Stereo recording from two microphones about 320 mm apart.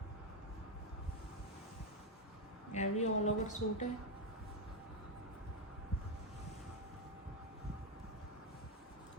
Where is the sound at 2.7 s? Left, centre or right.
Left.